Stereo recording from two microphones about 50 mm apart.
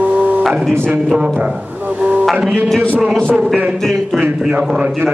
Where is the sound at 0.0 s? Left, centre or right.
Right.